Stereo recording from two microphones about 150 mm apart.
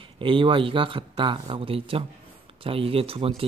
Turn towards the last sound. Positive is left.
turn(degrees=-40)  # may be behind; listen again after turning